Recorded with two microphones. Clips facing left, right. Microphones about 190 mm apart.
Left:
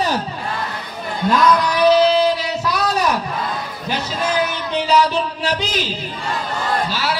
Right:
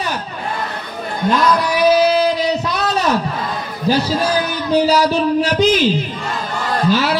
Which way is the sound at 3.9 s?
35° right (ahead or behind).